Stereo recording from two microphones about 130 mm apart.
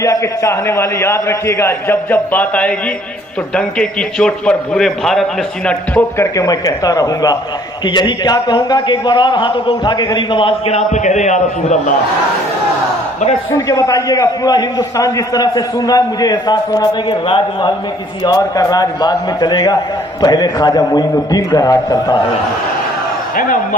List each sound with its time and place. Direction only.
0.0 s a man's voice: 25° left (ahead or behind); by 5.2 s 5° left (ahead or behind)
5.6 s a man's voice: 15° left (ahead or behind)
6.3 s a man's voice: 25° left (ahead or behind)
10.7 s a man's voice: 60° left (ahead or behind)
13.7 s a man's voice: 25° left (ahead or behind)